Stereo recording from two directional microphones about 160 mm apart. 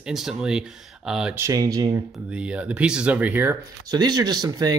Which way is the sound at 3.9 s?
25° right (ahead or behind).